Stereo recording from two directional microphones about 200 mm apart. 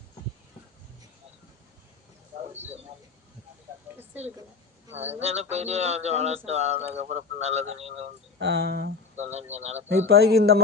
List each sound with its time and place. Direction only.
2.4 s a sound: 35° right (ahead or behind)
5.2 s speech: 30° right (ahead or behind)
8.4 s speech: 55° right (ahead or behind)
9.1 s speech: 35° right (ahead or behind)
10.0 s speech: 50° right (ahead or behind)